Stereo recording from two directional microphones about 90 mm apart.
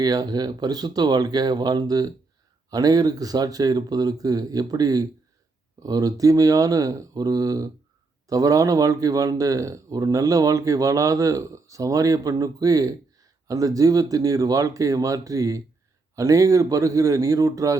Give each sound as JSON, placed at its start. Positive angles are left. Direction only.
{"t": 0.0, "sound": "speech", "side_deg": -45}